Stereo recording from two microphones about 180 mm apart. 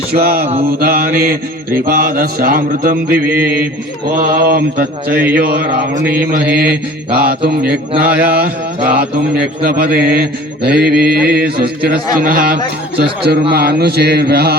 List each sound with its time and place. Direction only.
0.1 s mantra: 55° right (ahead or behind)
0.4 s mantra: 35° right (ahead or behind)
0.7 s mantra: 55° right (ahead or behind)
8.0 s mantra: 10° right (ahead or behind)
9.0 s mantra: 60° right (ahead or behind)